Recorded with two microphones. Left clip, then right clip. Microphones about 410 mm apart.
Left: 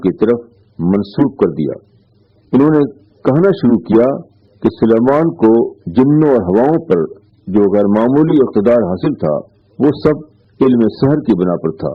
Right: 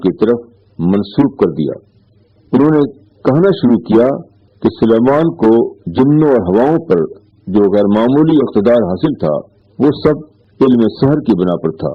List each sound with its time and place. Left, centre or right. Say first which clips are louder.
0.0 s a man's voice: right 1 dB; right